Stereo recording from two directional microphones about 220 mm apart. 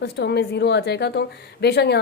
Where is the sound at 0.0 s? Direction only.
50° left (ahead or behind).